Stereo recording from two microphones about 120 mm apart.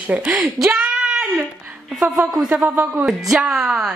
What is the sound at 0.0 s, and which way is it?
Speech, 15° right (ahead or behind).